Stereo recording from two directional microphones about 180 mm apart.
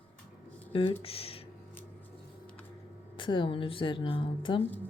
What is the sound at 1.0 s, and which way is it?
Speech, 30° left (ahead or behind).